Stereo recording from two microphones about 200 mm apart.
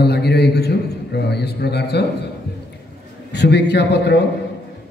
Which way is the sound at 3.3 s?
55° left (ahead or behind).